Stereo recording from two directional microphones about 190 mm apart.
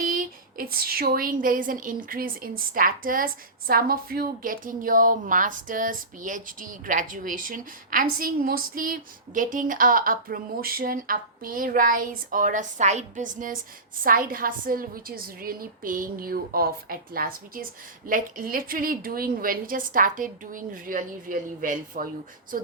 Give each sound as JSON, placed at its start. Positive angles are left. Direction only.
{"t": 0.1, "sound": "a woman's voice", "side_deg": -50}